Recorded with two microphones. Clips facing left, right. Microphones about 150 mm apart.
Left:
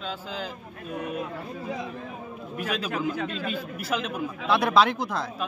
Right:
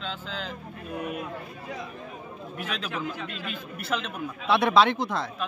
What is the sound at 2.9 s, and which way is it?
Speech, 45° left (ahead or behind).